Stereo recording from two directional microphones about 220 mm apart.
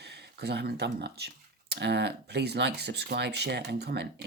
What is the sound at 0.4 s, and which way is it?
Speech, 50° right (ahead or behind).